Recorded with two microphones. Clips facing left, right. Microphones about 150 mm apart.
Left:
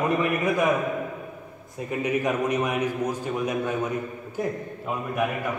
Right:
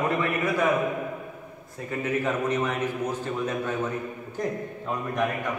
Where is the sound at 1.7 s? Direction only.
15° left (ahead or behind).